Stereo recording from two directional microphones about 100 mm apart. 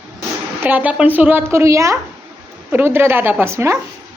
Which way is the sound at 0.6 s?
15° right (ahead or behind).